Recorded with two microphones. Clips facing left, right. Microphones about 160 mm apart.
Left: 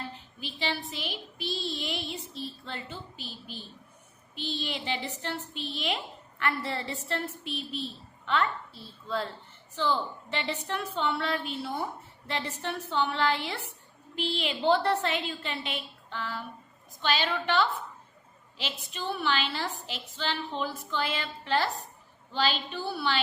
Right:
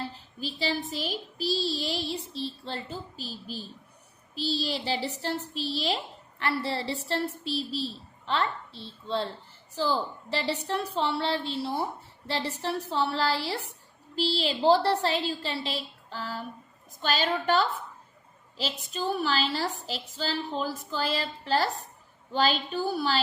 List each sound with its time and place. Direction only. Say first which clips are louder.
0.1 s child singing: right 5 dB; 35° right (ahead or behind)
17.0 s a woman's voice: right 1 dB; 40° right (ahead or behind)
18.5 s child singing: right 5 dB; 40° right (ahead or behind)
22.3 s a woman's voice: right 3 dB; 45° right (ahead or behind)